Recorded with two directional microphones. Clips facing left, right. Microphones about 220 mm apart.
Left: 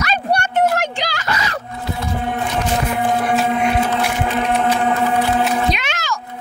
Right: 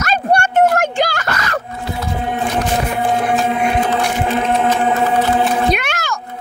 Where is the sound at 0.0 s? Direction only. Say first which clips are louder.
Right 3 dB; 45° right (ahead or behind).